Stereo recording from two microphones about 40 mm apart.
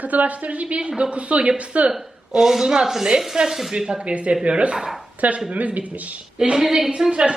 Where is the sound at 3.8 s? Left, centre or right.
Right.